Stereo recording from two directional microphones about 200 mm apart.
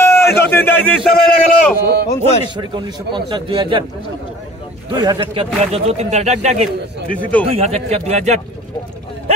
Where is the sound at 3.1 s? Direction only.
25° right (ahead or behind).